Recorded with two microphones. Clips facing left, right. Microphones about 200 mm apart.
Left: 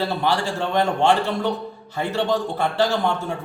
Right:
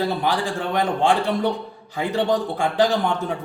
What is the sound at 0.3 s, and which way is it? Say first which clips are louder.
A man's voice: left 1 dB; 15° right (ahead or behind).